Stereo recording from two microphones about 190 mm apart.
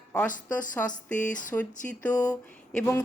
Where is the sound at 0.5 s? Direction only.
10° left (ahead or behind).